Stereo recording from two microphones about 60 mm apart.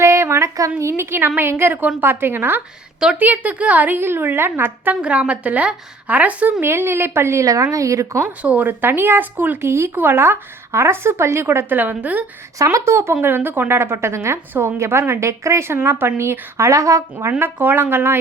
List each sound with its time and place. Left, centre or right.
0.0 s a sound: right
0.8 s speech: right
3.2 s speech: right
5.0 s a woman's voice: right
6.6 s speech: right
7.4 s speech: right
8.4 s a woman's voice: right
8.6 s speech: right
9.9 s speech: right
12.7 s speech: right
13.2 s speech: right
17.4 s speech: right